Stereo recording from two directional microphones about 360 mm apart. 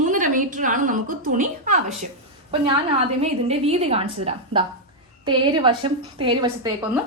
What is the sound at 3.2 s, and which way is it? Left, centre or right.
A woman's voice, centre.